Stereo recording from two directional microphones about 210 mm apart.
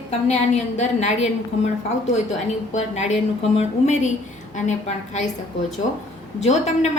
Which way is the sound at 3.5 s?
35° left (ahead or behind).